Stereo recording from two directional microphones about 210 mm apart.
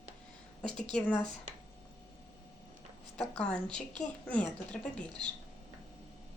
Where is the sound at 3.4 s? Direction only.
5° left (ahead or behind).